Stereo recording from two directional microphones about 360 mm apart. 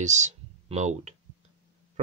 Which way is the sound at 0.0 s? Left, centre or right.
Centre.